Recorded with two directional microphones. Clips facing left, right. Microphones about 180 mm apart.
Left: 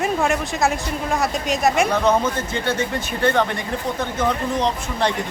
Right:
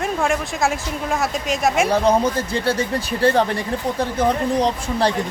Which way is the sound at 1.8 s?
35° right (ahead or behind).